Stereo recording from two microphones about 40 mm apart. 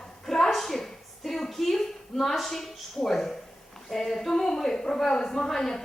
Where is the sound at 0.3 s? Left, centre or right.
Centre.